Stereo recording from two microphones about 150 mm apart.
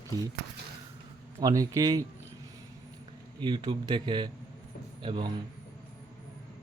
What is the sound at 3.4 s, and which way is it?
A man's voice, 30° right (ahead or behind).